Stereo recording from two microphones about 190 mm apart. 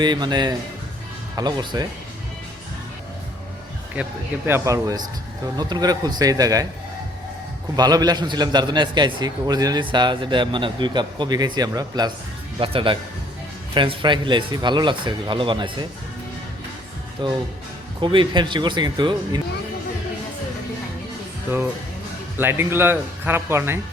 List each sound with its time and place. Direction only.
0.0 s a man's voice: 20° right (ahead or behind)
4.0 s a man's voice: 5° right (ahead or behind)
7.8 s a man's voice: 20° right (ahead or behind)
17.2 s a man's voice: 25° right (ahead or behind)
22.4 s speech: 10° right (ahead or behind)